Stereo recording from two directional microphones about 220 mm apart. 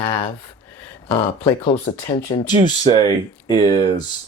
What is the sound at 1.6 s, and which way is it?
Speech, 25° left (ahead or behind).